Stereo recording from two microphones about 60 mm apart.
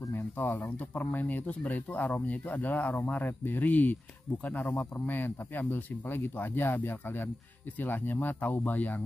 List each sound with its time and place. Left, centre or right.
0.1 s speech: left